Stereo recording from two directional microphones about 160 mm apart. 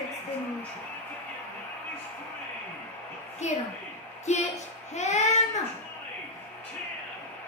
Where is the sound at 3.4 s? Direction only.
45° left (ahead or behind).